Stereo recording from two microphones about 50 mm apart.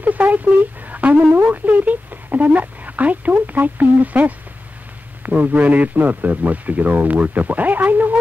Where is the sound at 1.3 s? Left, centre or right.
Right.